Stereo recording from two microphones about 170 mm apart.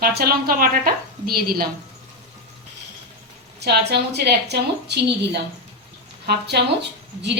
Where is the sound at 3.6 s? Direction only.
75° right (ahead or behind).